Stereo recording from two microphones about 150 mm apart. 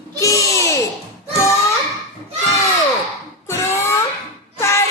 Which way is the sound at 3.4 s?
20° left (ahead or behind).